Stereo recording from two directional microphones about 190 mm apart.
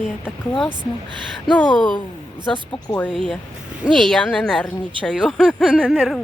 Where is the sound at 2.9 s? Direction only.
5° left (ahead or behind).